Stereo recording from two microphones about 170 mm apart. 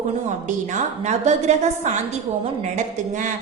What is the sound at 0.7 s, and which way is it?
A woman's voice, 45° right (ahead or behind).